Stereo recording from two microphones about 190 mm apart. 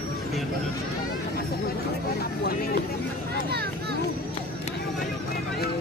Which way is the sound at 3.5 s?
60° right (ahead or behind).